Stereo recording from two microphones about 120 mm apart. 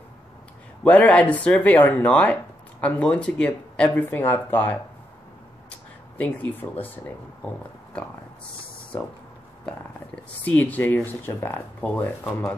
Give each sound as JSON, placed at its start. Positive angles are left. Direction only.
{"t": 0.8, "sound": "speech", "side_deg": 10}
{"t": 6.1, "sound": "speech", "side_deg": 10}
{"t": 7.9, "sound": "speech", "side_deg": 10}
{"t": 9.7, "sound": "speech", "side_deg": 10}